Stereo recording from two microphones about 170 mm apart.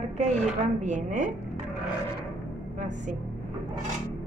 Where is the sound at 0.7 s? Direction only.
45° right (ahead or behind).